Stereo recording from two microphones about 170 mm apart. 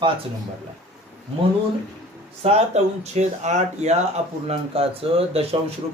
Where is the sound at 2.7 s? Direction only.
40° right (ahead or behind).